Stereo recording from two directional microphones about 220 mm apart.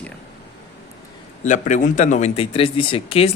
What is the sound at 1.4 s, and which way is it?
Speech, 35° left (ahead or behind).